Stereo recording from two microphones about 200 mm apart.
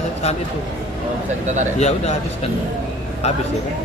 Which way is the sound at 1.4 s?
35° right (ahead or behind).